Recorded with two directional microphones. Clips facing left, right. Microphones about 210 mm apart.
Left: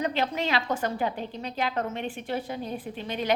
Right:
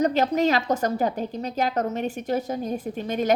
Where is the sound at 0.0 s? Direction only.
40° right (ahead or behind).